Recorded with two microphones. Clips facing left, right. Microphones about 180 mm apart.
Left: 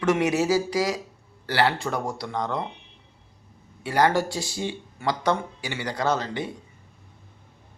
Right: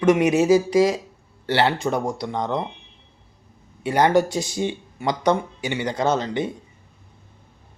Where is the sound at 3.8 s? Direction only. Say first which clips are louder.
Right 4 dB; 20° right (ahead or behind).